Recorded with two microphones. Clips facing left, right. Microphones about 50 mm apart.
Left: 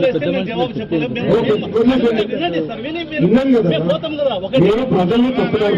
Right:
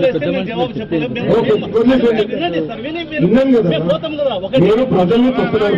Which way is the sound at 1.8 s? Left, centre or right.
Centre.